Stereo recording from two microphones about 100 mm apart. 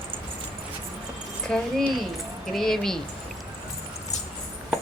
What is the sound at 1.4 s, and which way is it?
Speech, 5° left (ahead or behind).